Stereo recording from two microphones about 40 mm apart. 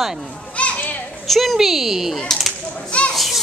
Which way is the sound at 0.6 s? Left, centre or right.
Left.